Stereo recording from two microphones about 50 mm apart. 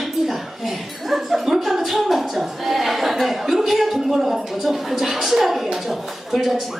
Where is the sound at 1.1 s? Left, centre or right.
Centre.